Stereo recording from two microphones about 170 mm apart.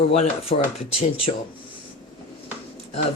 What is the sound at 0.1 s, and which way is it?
Speech, 35° left (ahead or behind).